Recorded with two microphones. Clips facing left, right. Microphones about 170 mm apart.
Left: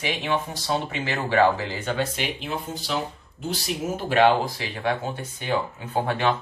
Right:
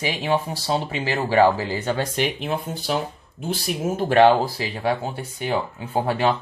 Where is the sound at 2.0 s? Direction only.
50° right (ahead or behind).